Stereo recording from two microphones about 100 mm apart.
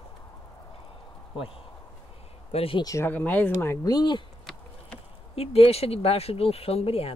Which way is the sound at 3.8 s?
40° left (ahead or behind).